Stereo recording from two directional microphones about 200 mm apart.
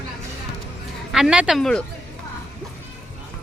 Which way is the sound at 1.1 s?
5° right (ahead or behind).